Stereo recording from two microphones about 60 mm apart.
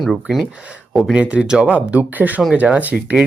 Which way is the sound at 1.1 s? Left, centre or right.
Centre.